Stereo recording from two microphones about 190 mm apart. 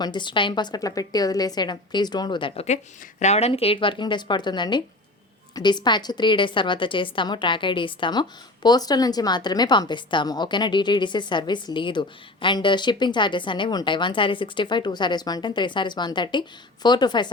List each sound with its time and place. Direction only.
0.0 s a woman's voice: 25° left (ahead or behind)